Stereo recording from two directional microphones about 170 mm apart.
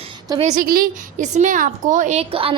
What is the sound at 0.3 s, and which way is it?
Speech, 40° right (ahead or behind).